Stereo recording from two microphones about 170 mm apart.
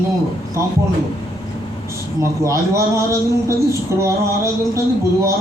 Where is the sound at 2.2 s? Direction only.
15° right (ahead or behind).